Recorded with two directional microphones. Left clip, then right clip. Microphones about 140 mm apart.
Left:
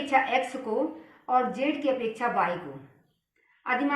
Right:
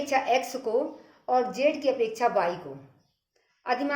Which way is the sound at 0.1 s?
60° right (ahead or behind).